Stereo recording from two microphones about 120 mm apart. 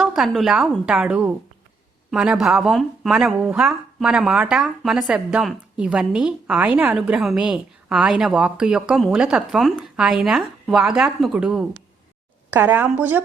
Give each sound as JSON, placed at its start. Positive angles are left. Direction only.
{"t": 0.0, "sound": "a woman's voice", "side_deg": 0}
{"t": 6.9, "sound": "a woman's voice", "side_deg": 0}
{"t": 12.5, "sound": "a woman's voice", "side_deg": -15}